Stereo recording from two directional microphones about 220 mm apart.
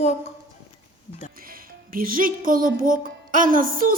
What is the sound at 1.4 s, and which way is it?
Speech, 40° right (ahead or behind).